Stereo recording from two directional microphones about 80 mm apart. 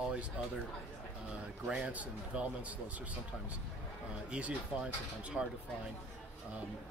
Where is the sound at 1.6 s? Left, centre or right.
Centre.